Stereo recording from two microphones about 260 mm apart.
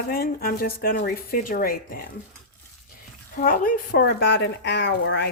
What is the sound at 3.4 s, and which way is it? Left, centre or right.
Speech, left.